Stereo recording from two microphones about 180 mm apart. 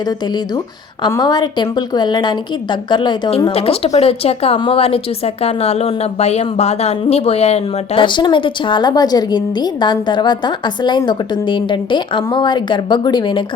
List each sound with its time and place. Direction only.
1.0 s a woman's voice: 25° left (ahead or behind)